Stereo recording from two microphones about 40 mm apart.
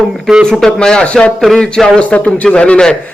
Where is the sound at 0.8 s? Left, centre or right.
Centre.